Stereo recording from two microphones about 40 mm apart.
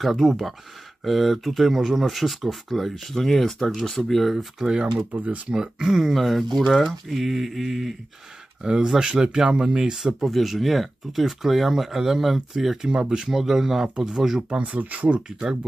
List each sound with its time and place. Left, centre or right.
0.0 s speech: centre
4.6 s speech: centre
6.1 s speech: centre
8.8 s speech: centre
10.2 s speech: centre; by 13.4 s right
13.4 s speech: centre
14.6 s speech: right